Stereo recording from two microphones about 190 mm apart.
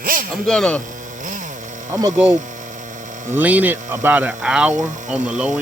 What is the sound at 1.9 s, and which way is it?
Speech, 20° right (ahead or behind).